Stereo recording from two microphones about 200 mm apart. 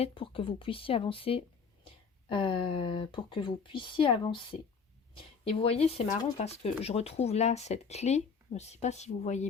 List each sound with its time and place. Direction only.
0.0 s speech: 25° left (ahead or behind)